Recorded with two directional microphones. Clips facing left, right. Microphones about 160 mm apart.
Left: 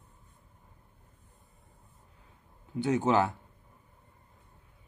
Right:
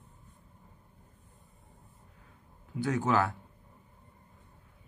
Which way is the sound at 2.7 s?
25° left (ahead or behind).